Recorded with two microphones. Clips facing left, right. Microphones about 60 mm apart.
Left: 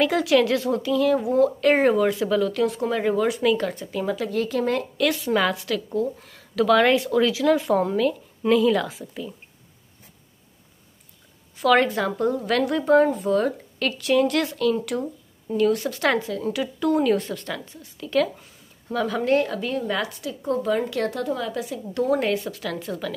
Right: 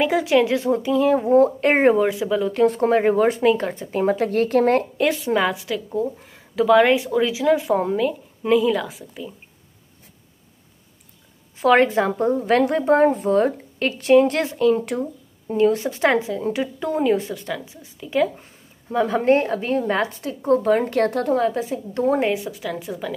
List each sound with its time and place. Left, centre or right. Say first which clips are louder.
0.0 s a woman's voice: right 1 dB; right
2.0 s a woman's voice: even; centre
2.5 s a woman's voice: right 6 dB; right
5.3 s a woman's voice: right 1 dB; centre
11.5 s a woman's voice: right 3 dB; right
18.9 s a woman's voice: right 4 dB; right
22.3 s a woman's voice: right 1 dB; centre